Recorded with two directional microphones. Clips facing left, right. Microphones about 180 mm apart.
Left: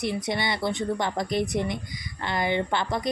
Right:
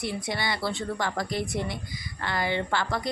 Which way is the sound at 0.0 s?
20° left (ahead or behind).